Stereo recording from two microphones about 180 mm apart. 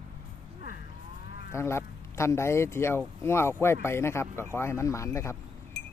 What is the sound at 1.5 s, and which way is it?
Speech, 15° left (ahead or behind).